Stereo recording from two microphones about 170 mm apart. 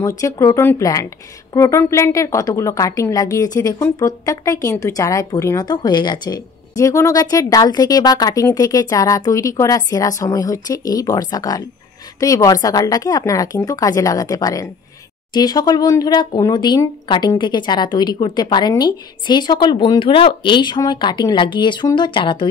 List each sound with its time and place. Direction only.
0.2 s speech: 20° left (ahead or behind)